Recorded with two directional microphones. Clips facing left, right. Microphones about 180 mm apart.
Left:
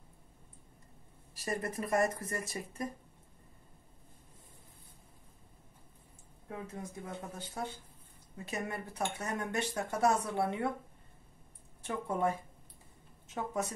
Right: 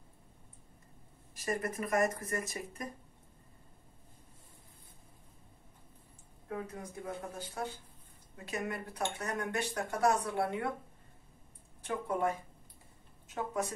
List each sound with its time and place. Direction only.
1.3 s speech: 30° left (ahead or behind)
6.7 s speech: 25° left (ahead or behind)
11.8 s speech: 25° left (ahead or behind)